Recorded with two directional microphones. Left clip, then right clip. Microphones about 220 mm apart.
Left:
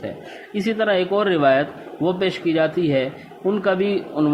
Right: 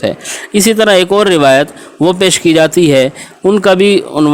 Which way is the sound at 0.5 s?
55° right (ahead or behind).